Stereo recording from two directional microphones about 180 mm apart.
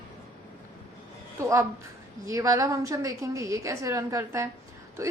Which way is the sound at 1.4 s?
15° right (ahead or behind).